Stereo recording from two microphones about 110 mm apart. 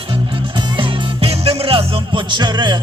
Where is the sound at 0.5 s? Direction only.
50° right (ahead or behind).